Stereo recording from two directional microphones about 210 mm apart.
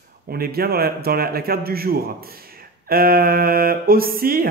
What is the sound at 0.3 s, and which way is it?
Speech, 45° right (ahead or behind).